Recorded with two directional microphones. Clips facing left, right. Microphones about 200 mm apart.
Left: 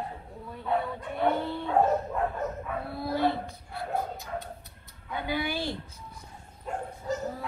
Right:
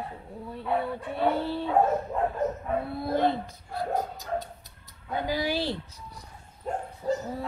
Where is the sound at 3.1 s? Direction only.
45° right (ahead or behind).